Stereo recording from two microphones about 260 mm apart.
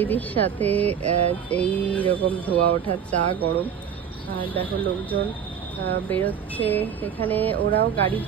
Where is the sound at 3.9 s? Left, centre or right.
Centre.